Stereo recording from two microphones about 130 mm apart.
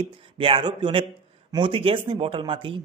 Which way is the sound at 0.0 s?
40° right (ahead or behind).